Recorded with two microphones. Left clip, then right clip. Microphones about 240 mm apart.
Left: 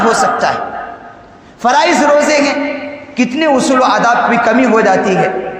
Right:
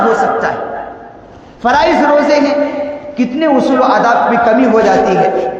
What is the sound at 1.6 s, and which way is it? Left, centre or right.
A man's voice, left.